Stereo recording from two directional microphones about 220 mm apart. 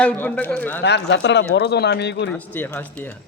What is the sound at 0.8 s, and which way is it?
Speech, 50° left (ahead or behind).